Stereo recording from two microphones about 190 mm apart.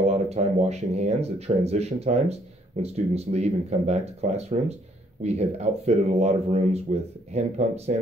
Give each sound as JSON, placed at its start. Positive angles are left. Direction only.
{"t": 0.0, "sound": "speech", "side_deg": -35}